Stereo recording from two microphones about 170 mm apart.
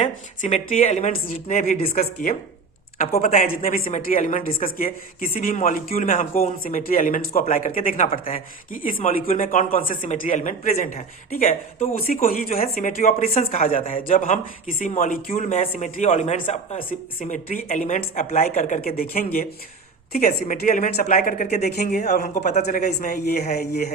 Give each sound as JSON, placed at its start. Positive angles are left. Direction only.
{"t": 0.0, "sound": "speech", "side_deg": 45}
{"t": 1.9, "sound": "a woman's voice", "side_deg": 60}
{"t": 18.8, "sound": "a woman's voice", "side_deg": 60}
{"t": 22.0, "sound": "speech", "side_deg": 45}
{"t": 22.6, "sound": "a woman's voice", "side_deg": 65}